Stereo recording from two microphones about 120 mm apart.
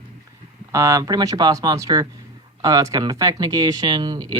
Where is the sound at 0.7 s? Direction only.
25° right (ahead or behind).